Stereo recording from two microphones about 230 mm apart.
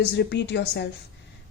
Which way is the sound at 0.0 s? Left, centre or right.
Left.